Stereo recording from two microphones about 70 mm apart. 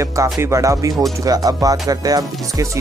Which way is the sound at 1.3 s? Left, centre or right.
Right.